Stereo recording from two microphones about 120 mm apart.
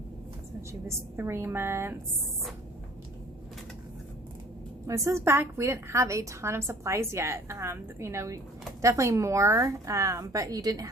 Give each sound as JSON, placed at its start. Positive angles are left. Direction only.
{"t": 0.7, "sound": "a woman's voice", "side_deg": -20}
{"t": 4.9, "sound": "a woman's voice", "side_deg": -25}